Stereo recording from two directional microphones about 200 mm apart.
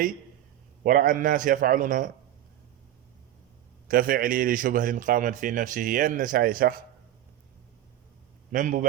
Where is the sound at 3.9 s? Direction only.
45° right (ahead or behind).